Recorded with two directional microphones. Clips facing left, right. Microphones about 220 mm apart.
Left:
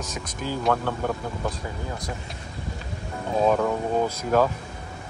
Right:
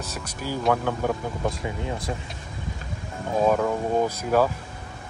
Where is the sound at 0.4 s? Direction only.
10° right (ahead or behind).